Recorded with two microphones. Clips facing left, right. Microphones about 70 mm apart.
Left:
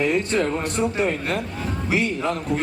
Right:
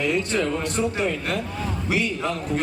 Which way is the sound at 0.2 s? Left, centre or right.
Left.